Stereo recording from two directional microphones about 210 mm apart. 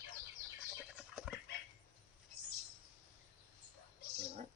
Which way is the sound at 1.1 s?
5° right (ahead or behind).